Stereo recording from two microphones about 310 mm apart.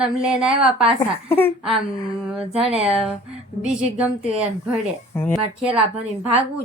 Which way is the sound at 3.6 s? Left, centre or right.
Centre.